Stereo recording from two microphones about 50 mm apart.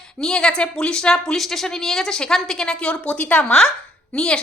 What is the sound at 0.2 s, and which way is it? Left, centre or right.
A woman's voice, centre.